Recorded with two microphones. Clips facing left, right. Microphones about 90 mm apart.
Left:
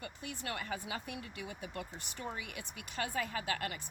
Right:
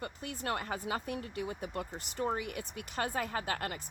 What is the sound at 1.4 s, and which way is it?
Speech, 30° right (ahead or behind).